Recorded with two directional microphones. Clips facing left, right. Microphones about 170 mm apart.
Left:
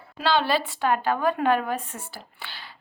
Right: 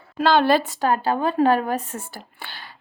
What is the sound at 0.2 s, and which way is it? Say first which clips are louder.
A woman's voice: right 6 dB; 50° right (ahead or behind).